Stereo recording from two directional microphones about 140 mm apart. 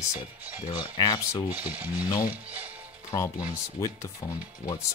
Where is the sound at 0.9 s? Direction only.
30° left (ahead or behind).